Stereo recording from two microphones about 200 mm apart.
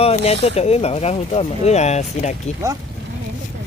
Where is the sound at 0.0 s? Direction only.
30° left (ahead or behind).